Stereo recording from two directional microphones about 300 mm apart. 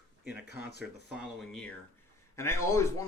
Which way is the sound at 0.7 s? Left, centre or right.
Left.